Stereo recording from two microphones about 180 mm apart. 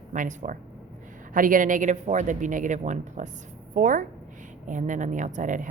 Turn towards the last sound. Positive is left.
turn(degrees=-45)  # may be behind; listen again after turning